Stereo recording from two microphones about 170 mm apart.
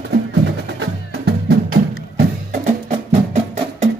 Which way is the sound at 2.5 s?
40° right (ahead or behind).